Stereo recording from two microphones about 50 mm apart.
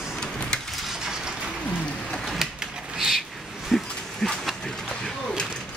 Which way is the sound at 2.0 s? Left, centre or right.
Centre.